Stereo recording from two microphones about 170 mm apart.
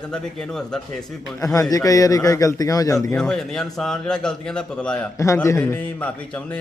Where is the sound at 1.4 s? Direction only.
20° left (ahead or behind).